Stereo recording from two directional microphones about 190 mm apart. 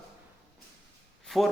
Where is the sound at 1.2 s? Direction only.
Centre (ahead or behind).